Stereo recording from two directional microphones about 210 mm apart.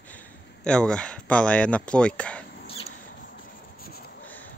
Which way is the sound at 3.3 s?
45° left (ahead or behind).